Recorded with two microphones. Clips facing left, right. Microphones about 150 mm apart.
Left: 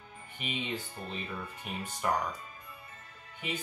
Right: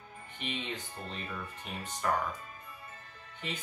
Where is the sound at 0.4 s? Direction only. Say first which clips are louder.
Left 2 dB; 10° left (ahead or behind).